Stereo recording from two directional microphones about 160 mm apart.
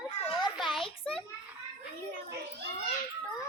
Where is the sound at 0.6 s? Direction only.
Centre (ahead or behind).